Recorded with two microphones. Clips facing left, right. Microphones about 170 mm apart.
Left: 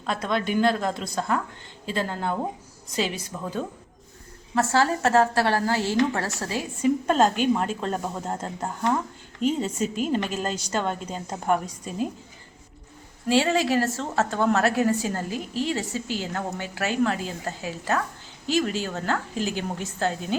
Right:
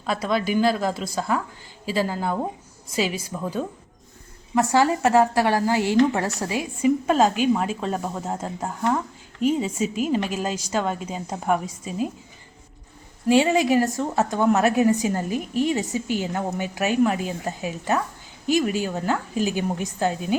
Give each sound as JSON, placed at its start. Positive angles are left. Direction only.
{"t": 0.0, "sound": "a woman's voice", "side_deg": -5}
{"t": 13.2, "sound": "a woman's voice", "side_deg": -15}